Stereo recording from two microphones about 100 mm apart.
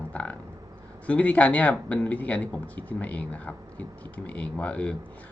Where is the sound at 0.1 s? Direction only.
15° left (ahead or behind).